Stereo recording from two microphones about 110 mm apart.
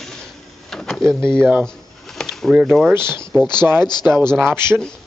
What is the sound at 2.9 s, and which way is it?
Speech, 20° right (ahead or behind).